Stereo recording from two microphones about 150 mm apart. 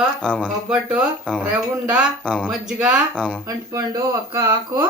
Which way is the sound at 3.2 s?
10° left (ahead or behind).